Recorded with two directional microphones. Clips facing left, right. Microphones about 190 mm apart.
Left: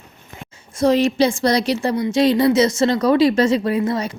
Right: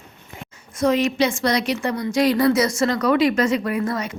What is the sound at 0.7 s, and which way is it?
A woman's voice, 30° left (ahead or behind).